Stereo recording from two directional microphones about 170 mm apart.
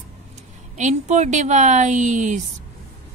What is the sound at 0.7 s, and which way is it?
A woman's voice, 45° right (ahead or behind).